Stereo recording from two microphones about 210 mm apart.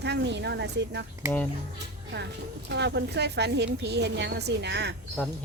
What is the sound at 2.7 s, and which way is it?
A woman's voice, 55° right (ahead or behind).